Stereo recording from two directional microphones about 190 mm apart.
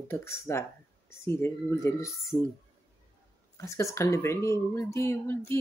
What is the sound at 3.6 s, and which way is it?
Speech, 15° left (ahead or behind).